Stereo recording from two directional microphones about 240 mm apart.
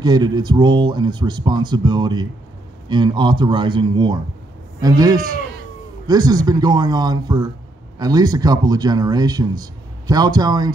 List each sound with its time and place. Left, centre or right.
0.0 s speech: centre